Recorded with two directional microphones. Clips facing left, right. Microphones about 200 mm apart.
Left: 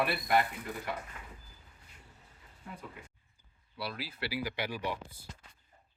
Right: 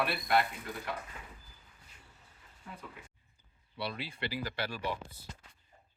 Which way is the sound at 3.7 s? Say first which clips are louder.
Right 1 dB; centre (ahead or behind).